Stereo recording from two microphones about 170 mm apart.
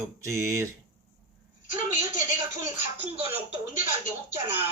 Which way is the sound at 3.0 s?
35° right (ahead or behind).